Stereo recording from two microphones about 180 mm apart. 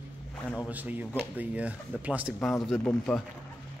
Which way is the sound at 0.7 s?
10° right (ahead or behind).